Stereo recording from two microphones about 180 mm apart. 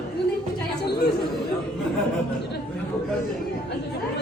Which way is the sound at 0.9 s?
65° left (ahead or behind).